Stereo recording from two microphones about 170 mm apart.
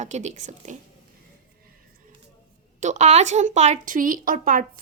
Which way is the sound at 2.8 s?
45° right (ahead or behind).